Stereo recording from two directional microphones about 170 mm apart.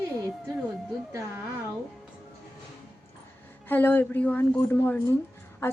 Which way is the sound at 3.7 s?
10° left (ahead or behind).